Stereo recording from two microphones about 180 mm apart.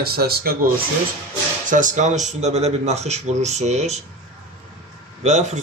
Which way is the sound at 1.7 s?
45° right (ahead or behind).